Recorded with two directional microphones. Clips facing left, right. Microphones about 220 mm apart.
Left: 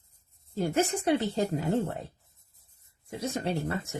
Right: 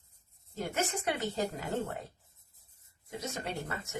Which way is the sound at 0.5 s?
30° left (ahead or behind).